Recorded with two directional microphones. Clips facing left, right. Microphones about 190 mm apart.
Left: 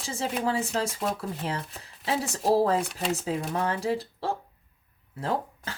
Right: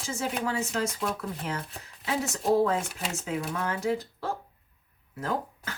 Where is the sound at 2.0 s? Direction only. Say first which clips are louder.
Left 2 dB; 35° left (ahead or behind).